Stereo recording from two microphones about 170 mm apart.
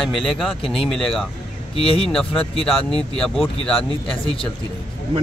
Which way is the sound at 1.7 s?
35° left (ahead or behind).